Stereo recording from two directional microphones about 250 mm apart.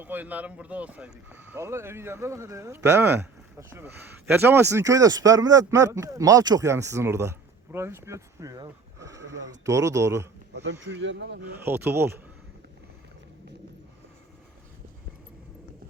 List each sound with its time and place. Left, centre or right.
0.0 s speech: centre
10.5 s speech: right
11.5 s speech: centre